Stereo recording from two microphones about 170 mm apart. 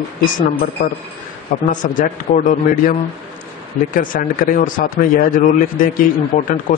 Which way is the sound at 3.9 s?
55° left (ahead or behind).